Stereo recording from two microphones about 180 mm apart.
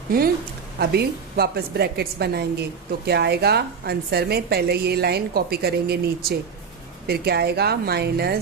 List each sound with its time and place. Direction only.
0.1 s a woman's voice: 55° right (ahead or behind)